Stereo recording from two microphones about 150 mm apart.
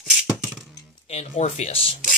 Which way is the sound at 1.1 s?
45° left (ahead or behind).